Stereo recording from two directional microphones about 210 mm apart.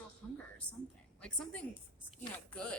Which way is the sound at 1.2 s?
5° left (ahead or behind).